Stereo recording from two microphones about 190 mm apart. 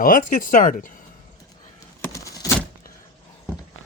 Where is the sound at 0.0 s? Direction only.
45° left (ahead or behind).